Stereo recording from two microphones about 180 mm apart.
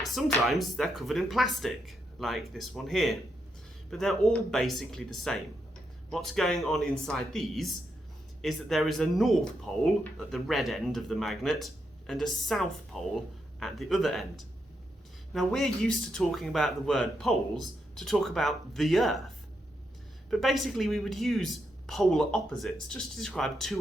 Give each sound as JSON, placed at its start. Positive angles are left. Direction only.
{"t": 0.0, "sound": "speech", "side_deg": 0}
{"t": 20.3, "sound": "speech", "side_deg": 0}